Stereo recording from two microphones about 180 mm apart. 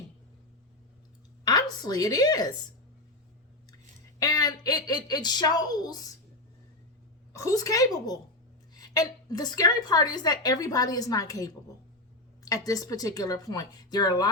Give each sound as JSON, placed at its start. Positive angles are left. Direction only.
{"t": 1.5, "sound": "a woman's voice", "side_deg": 20}
{"t": 4.2, "sound": "a woman's voice", "side_deg": 20}
{"t": 7.3, "sound": "a woman's voice", "side_deg": 20}